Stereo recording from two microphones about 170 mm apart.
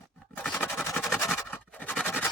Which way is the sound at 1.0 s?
15° left (ahead or behind).